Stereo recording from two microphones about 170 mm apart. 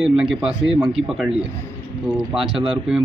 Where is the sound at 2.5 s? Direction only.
30° right (ahead or behind).